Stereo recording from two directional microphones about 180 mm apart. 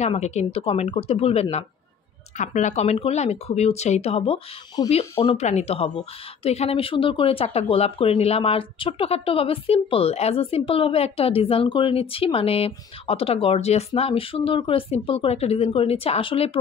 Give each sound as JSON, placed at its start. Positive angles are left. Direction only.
{"t": 0.0, "sound": "speech", "side_deg": 40}